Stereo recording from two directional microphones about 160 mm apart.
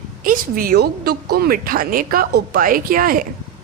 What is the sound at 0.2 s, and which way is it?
A woman's voice, 60° right (ahead or behind).